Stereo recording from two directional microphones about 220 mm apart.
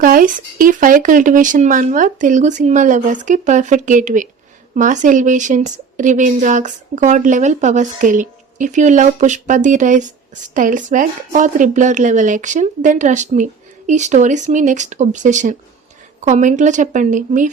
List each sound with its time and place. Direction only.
0.0 s a woman's voice: 40° right (ahead or behind)